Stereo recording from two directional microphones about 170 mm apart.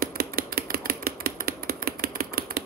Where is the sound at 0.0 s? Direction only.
60° right (ahead or behind).